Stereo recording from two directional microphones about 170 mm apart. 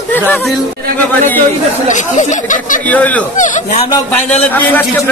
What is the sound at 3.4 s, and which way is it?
Speech, 45° left (ahead or behind).